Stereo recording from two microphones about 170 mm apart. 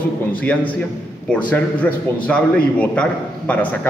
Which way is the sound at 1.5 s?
10° left (ahead or behind).